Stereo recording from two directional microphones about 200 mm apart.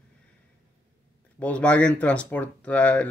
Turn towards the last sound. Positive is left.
turn(degrees=5)  # may be behind; listen again after turning